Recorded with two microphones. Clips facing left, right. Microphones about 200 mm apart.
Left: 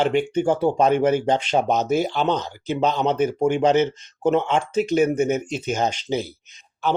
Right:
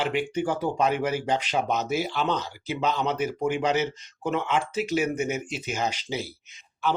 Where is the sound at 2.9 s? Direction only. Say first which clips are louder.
Left 5 dB; 25° left (ahead or behind).